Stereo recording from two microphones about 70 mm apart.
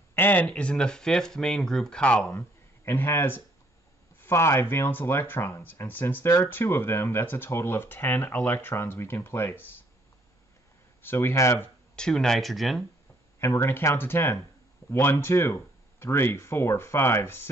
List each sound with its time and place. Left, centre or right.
0.1 s speech: left
2.3 s speech: left
11.0 s speech: left
11.9 s speech: centre
13.4 s speech: left